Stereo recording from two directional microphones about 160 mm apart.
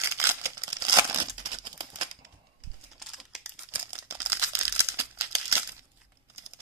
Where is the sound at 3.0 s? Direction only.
Centre (ahead or behind).